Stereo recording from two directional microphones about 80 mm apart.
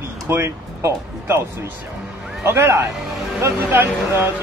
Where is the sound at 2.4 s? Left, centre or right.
Right.